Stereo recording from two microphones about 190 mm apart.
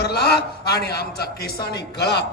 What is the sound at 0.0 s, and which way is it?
A man's voice, 60° left (ahead or behind).